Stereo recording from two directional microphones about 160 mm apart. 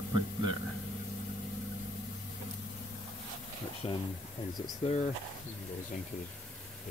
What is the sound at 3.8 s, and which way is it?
Speech, 25° left (ahead or behind).